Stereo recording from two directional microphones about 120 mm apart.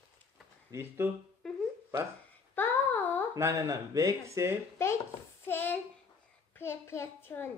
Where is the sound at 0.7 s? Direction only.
20° right (ahead or behind).